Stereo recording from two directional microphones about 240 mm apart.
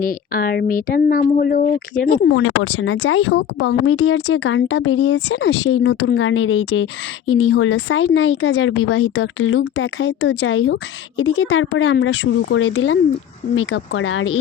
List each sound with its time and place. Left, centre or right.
0.0 s speech: left
2.3 s speech: left